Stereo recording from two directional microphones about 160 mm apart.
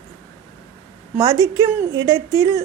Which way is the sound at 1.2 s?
20° right (ahead or behind).